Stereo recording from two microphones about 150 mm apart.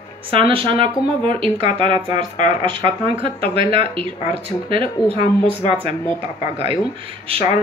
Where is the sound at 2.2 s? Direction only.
55° left (ahead or behind).